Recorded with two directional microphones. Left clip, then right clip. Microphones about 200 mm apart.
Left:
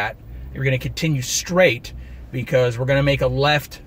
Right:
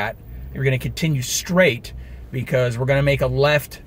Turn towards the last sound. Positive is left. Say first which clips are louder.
# right 1 dB
turn(degrees=-15)  # may be behind; listen again after turning